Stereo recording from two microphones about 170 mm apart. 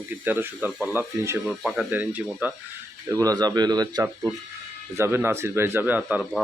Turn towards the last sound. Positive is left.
turn(degrees=-5)  # may be behind; listen again after turning